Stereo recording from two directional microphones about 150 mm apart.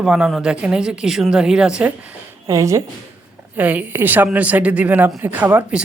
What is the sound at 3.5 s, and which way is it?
Speech, 10° right (ahead or behind).